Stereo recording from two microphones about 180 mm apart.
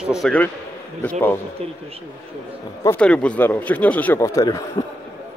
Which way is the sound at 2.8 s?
10° left (ahead or behind).